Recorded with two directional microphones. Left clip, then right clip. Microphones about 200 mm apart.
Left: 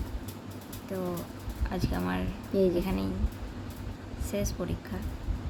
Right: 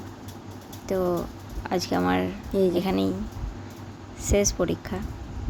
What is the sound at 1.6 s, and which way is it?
Speech, 30° right (ahead or behind).